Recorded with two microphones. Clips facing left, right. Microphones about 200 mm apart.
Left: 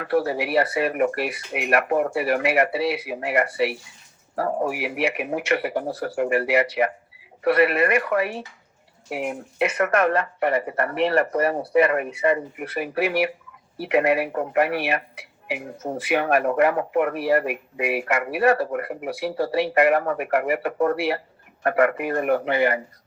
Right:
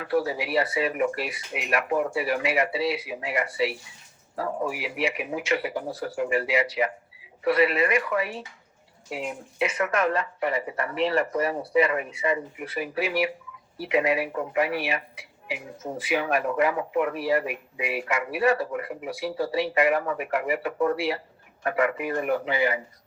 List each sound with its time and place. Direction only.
0.0 s speech: 60° left (ahead or behind)